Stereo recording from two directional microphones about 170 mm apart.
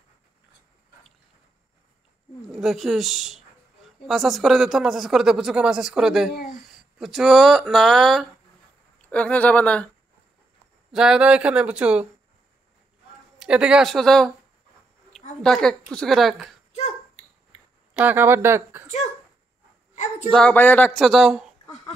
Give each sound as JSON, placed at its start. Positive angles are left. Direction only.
{"t": 2.5, "sound": "speech", "side_deg": 0}
{"t": 6.3, "sound": "speech", "side_deg": 55}
{"t": 6.7, "sound": "speech", "side_deg": 0}
{"t": 10.9, "sound": "speech", "side_deg": -5}
{"t": 13.4, "sound": "speech", "side_deg": -5}
{"t": 15.4, "sound": "speech", "side_deg": 5}
{"t": 16.7, "sound": "a sound", "side_deg": 40}
{"t": 17.9, "sound": "speech", "side_deg": -10}
{"t": 20.2, "sound": "speech", "side_deg": 5}